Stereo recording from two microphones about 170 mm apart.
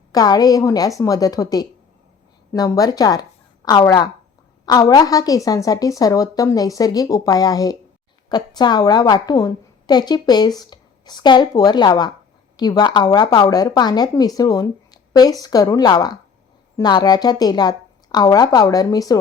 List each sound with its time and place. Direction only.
0.1 s a woman's voice: 20° left (ahead or behind)